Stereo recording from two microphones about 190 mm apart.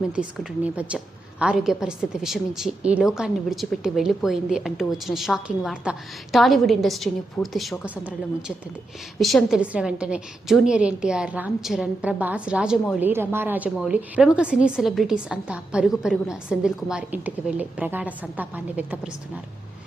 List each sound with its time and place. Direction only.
0.2 s a woman's voice: 5° right (ahead or behind)